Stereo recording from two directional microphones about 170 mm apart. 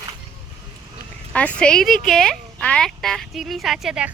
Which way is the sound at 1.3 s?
5° left (ahead or behind).